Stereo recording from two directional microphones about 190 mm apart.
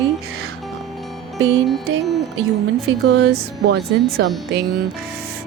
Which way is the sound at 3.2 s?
60° right (ahead or behind).